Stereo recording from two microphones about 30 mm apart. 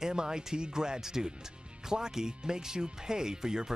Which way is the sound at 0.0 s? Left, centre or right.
Right.